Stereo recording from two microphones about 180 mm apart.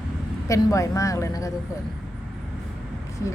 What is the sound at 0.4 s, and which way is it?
A woman's voice, 15° left (ahead or behind).